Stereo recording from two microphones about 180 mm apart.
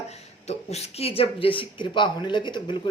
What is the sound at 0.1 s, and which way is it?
A woman's voice, 35° left (ahead or behind).